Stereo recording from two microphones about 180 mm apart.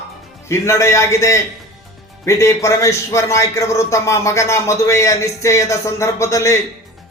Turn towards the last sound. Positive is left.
turn(degrees=15)  # may be behind; listen again after turning